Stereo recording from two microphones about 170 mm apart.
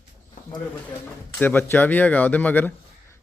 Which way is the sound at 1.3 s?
10° left (ahead or behind).